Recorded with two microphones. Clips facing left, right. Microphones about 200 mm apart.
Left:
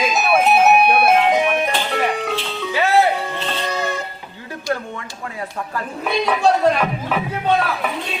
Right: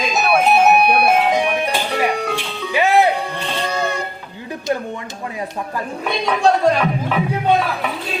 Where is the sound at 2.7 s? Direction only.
15° right (ahead or behind).